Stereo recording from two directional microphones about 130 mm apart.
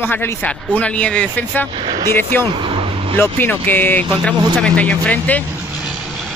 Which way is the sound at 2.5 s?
40° right (ahead or behind).